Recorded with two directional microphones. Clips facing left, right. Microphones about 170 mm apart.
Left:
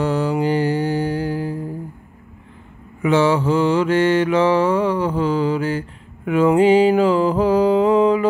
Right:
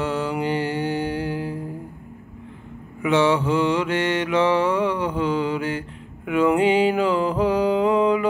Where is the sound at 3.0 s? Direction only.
35° left (ahead or behind).